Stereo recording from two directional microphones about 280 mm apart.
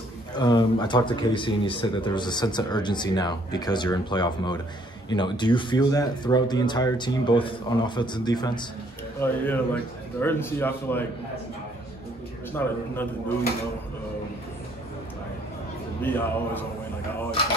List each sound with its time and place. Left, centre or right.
0.4 s speech: centre
12.6 s speech: centre
16.0 s speech: centre